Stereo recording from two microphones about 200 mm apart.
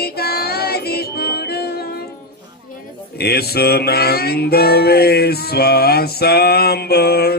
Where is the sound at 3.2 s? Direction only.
50° left (ahead or behind).